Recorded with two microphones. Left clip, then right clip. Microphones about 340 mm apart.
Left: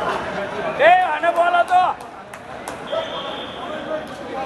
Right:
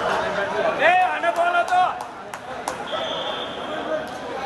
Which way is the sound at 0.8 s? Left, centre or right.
Centre.